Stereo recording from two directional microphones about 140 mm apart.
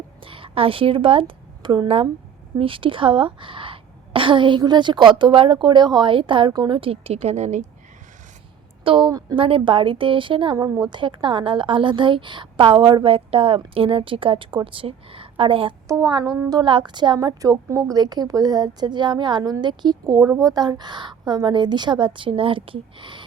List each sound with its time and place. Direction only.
0.2 s a woman's voice: 40° right (ahead or behind); by 7.6 s 55° right (ahead or behind)
8.8 s a woman's voice: 40° right (ahead or behind)
15.9 s a woman's voice: 25° right (ahead or behind)